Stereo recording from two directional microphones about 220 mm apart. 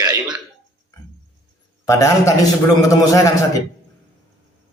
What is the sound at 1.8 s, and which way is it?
A man's voice, 15° left (ahead or behind).